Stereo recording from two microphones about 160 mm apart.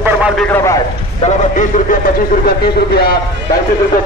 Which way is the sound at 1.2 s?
50° left (ahead or behind).